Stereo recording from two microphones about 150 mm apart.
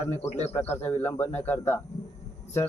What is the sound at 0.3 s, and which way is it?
Speech, 45° left (ahead or behind).